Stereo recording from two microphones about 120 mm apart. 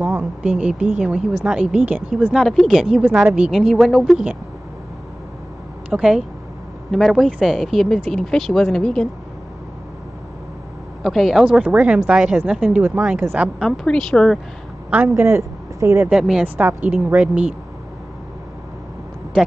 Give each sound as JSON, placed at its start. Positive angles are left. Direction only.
{"t": 0.0, "sound": "a woman's voice", "side_deg": -10}
{"t": 5.9, "sound": "speech", "side_deg": -5}
{"t": 11.0, "sound": "a woman's voice", "side_deg": 0}
{"t": 13.7, "sound": "speech", "side_deg": 5}
{"t": 15.1, "sound": "speech", "side_deg": -20}
{"t": 16.1, "sound": "speech", "side_deg": -5}
{"t": 16.4, "sound": "a woman's voice", "side_deg": -15}